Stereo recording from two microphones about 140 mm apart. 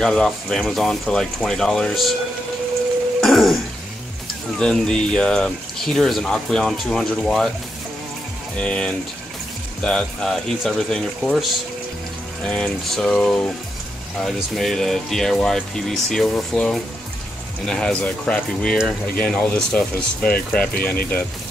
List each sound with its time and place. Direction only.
0.0 s speech: 5° left (ahead or behind)
3.2 s throat clearing: centre (ahead or behind)
4.6 s speech: 5° left (ahead or behind)
8.5 s speech: 5° left (ahead or behind)
12.4 s speech: 10° left (ahead or behind)